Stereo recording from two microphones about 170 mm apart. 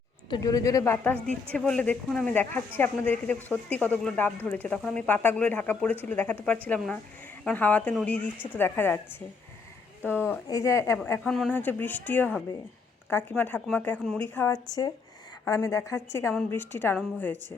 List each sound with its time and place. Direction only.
0.3 s speech: 25° left (ahead or behind)
10.1 s speech: 10° left (ahead or behind)
14.3 s speech: 15° left (ahead or behind)